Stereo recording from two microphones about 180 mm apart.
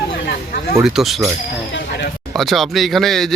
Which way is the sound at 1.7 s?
75° left (ahead or behind).